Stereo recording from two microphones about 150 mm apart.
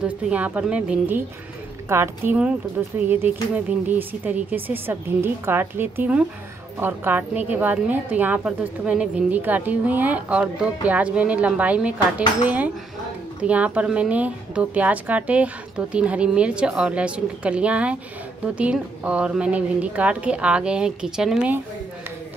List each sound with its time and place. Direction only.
0.0 s a woman's voice: 10° right (ahead or behind)